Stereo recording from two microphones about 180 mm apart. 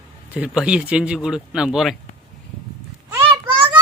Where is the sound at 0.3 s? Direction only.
5° right (ahead or behind).